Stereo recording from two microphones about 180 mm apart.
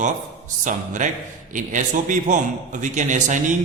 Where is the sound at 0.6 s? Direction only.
45° right (ahead or behind).